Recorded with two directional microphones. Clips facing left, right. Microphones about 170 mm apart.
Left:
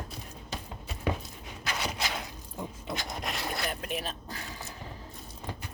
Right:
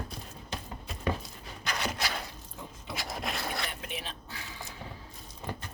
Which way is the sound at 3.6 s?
45° left (ahead or behind).